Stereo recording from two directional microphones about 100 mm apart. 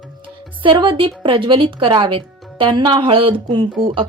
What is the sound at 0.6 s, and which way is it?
Speech, 60° right (ahead or behind).